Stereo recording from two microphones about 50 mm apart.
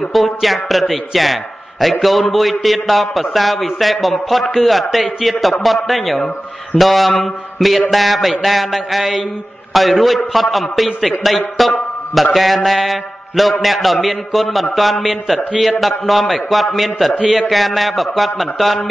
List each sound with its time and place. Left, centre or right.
0.1 s a man's voice: centre